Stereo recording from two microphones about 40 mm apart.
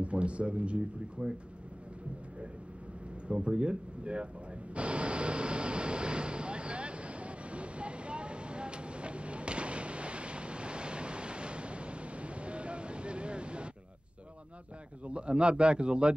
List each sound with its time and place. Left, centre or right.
0.0 s speech: right
3.3 s speech: right
4.7 s vehicle: right
15.0 s speech: right